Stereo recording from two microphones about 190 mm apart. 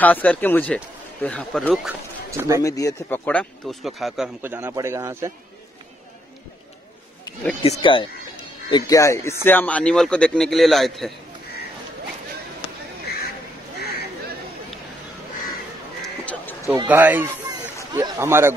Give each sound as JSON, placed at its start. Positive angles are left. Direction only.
{"t": 0.0, "sound": "speech", "side_deg": 10}
{"t": 2.3, "sound": "a man's voice", "side_deg": -15}
{"t": 2.6, "sound": "speech", "side_deg": 15}
{"t": 4.5, "sound": "a man's voice", "side_deg": -10}
{"t": 7.6, "sound": "speech", "side_deg": 30}
{"t": 16.0, "sound": "a sound", "side_deg": 5}
{"t": 16.6, "sound": "a man's voice", "side_deg": -10}